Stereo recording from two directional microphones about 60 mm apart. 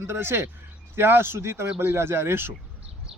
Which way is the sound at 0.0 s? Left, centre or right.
Right.